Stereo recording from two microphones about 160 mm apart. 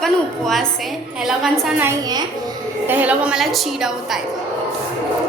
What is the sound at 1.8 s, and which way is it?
Speech, 20° right (ahead or behind).